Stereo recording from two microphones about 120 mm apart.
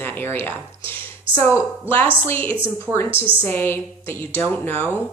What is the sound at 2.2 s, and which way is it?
A woman's voice, 15° left (ahead or behind).